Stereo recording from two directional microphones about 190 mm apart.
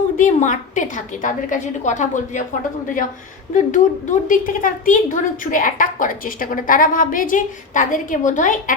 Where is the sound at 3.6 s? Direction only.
40° left (ahead or behind).